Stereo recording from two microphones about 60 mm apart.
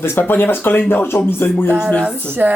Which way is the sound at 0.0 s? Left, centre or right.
Left.